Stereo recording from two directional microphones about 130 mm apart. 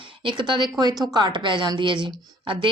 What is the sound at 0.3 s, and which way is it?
A woman's voice, 40° right (ahead or behind).